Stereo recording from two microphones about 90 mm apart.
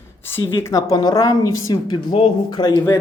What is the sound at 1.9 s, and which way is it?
Speech, 60° left (ahead or behind).